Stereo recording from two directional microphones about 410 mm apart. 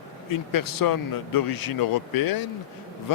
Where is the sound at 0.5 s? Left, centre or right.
Left.